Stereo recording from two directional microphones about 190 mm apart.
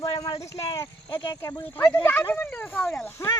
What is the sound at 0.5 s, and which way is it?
Speech, 15° left (ahead or behind).